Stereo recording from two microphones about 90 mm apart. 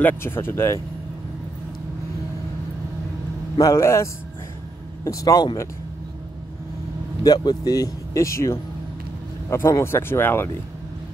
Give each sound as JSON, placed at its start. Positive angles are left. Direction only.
{"t": 0.0, "sound": "speech", "side_deg": 25}
{"t": 3.5, "sound": "a man's voice", "side_deg": 35}
{"t": 7.2, "sound": "speech", "side_deg": 50}